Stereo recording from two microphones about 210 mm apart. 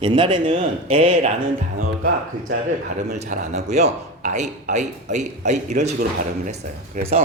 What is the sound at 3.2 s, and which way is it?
A man's voice, 30° right (ahead or behind).